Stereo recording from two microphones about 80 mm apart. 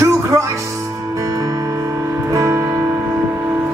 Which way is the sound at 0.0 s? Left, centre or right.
Right.